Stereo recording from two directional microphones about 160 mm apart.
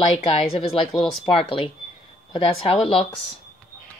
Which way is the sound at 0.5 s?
35° left (ahead or behind).